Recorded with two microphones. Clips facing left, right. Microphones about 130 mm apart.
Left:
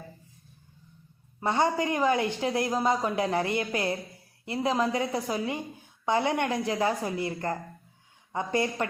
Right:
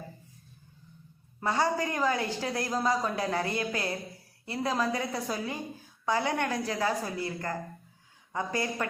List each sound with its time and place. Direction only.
1.4 s a woman's voice: 20° left (ahead or behind)